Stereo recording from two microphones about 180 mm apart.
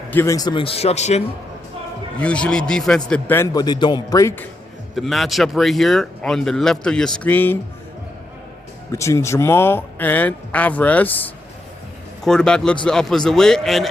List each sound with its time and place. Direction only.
0.1 s speech: 15° left (ahead or behind); by 1.2 s 40° left (ahead or behind)
2.1 s speech: 5° left (ahead or behind)
4.9 s speech: centre (ahead or behind)
8.9 s speech: 15° left (ahead or behind)